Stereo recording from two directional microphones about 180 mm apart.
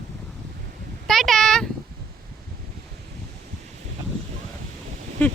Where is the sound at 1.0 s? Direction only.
Centre (ahead or behind).